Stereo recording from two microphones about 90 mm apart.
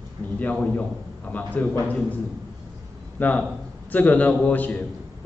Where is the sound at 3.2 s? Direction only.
20° left (ahead or behind).